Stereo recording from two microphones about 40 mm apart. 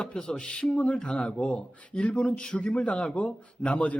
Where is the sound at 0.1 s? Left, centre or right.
Left.